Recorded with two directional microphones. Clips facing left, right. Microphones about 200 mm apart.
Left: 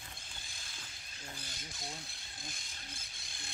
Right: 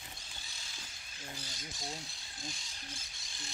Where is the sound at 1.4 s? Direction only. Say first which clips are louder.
Right 2 dB; 55° left (ahead or behind).